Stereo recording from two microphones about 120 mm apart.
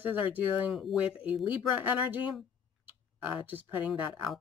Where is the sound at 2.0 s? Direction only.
15° right (ahead or behind).